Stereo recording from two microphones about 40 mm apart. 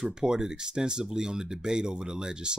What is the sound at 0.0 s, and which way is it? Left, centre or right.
Speech, centre.